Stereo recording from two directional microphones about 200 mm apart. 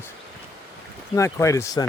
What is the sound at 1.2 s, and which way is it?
Speech, 15° left (ahead or behind).